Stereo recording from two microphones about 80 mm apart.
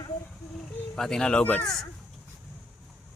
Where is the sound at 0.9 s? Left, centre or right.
Centre.